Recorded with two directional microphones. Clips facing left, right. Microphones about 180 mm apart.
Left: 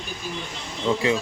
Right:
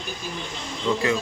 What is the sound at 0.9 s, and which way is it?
Speech, 25° left (ahead or behind).